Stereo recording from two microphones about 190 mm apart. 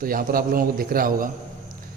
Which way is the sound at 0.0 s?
50° right (ahead or behind).